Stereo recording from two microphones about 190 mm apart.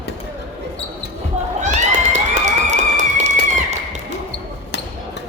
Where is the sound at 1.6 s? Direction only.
40° right (ahead or behind).